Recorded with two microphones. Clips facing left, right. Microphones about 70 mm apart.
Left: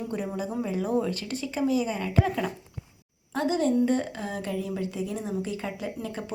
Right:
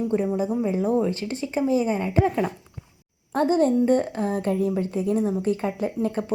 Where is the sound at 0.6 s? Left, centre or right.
Right.